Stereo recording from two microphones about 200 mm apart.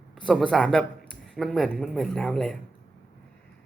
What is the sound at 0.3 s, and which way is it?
A woman's voice, centre (ahead or behind).